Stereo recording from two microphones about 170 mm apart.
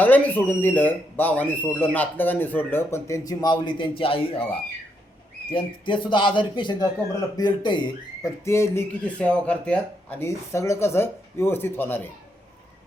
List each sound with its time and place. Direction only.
0.0 s speech: 10° left (ahead or behind); by 4.4 s 35° left (ahead or behind)
5.5 s speech: 30° left (ahead or behind)
8.4 s speech: 15° left (ahead or behind)